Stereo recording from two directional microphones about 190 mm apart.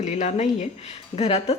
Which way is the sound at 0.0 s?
35° left (ahead or behind).